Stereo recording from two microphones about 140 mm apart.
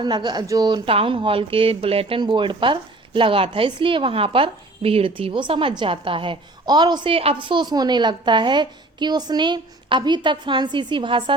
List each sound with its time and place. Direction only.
0.0 s speech: 30° right (ahead or behind)
0.9 s speech: 40° right (ahead or behind)